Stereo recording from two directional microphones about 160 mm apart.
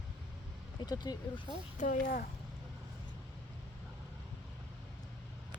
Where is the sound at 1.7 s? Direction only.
55° left (ahead or behind).